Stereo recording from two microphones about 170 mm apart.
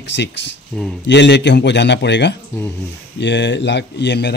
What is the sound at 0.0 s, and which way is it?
Speech, 90° left.